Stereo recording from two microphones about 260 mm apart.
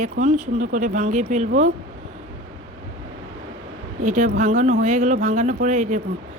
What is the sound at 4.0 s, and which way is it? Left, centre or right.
Mantra, right.